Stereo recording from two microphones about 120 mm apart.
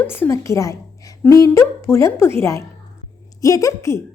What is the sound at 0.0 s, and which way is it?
A woman's voice, 20° left (ahead or behind).